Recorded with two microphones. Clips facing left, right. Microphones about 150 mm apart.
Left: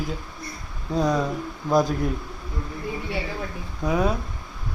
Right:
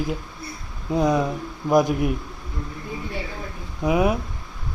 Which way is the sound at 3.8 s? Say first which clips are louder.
Right 3 dB; 15° right (ahead or behind).